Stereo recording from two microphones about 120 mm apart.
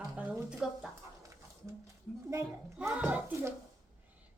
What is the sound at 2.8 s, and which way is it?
Speech, 10° right (ahead or behind).